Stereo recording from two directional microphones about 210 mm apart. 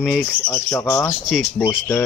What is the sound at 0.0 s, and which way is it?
Speech, 5° right (ahead or behind).